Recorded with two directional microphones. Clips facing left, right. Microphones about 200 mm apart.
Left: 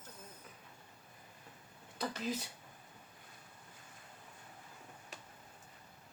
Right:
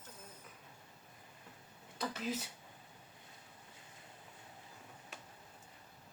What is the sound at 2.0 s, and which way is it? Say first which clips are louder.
Speech: left 1 dB; 5° right (ahead or behind).